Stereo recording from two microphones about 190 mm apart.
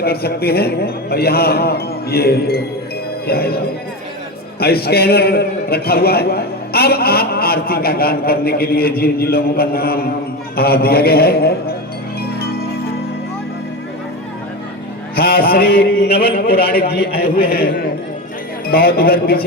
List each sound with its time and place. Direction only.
0.0 s a man's voice: 55° left (ahead or behind)
4.6 s a man's voice: 55° left (ahead or behind)
12.4 s music: 55° left (ahead or behind)
15.1 s a man's voice: 50° left (ahead or behind)
18.7 s a man's voice: 50° left (ahead or behind)